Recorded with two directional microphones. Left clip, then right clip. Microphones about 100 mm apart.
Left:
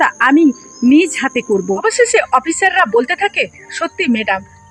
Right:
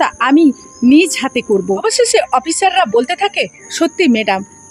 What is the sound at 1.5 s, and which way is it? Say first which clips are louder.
Speech: right 4 dB; 20° right (ahead or behind).